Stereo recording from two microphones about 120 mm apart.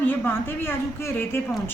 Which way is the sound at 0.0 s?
15° left (ahead or behind).